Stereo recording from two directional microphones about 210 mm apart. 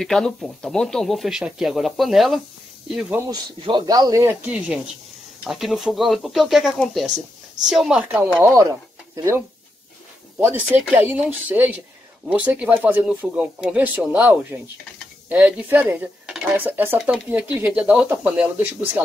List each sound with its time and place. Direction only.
0.0 s speech: centre (ahead or behind)
3.2 s speech: 20° right (ahead or behind)
10.4 s speech: 10° right (ahead or behind)